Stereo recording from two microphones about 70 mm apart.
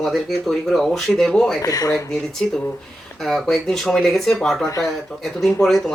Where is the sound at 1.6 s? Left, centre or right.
Left.